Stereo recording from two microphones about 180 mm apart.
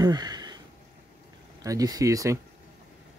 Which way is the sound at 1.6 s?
20° right (ahead or behind).